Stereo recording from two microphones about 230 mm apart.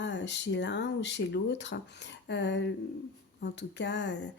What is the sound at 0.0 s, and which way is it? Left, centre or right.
Speech, left.